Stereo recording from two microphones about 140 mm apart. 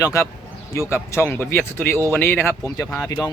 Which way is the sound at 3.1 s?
25° left (ahead or behind).